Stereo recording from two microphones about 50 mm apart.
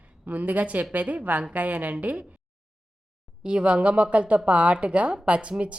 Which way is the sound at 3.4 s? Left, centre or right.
Right.